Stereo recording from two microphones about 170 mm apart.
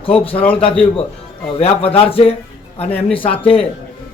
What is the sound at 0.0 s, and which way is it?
A man's voice, 35° left (ahead or behind).